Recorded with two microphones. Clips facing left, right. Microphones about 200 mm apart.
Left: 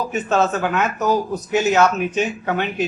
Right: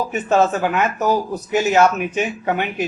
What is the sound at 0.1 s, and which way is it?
Speech, 10° right (ahead or behind).